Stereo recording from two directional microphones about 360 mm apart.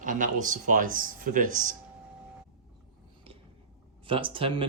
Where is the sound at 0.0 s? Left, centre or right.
Right.